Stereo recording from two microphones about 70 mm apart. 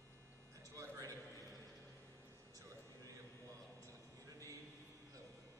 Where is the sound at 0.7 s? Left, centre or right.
Right.